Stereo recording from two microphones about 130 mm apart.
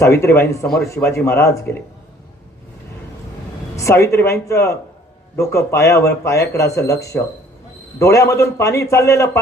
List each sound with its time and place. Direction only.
0.0 s speech: 20° left (ahead or behind)
3.8 s speech: 25° left (ahead or behind)